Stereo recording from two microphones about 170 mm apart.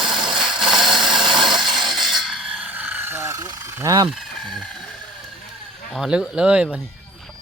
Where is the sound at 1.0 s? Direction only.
25° right (ahead or behind).